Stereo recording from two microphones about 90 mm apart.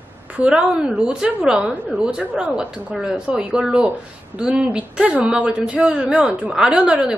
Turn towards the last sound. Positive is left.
turn(degrees=-10)  # may be behind; listen again after turning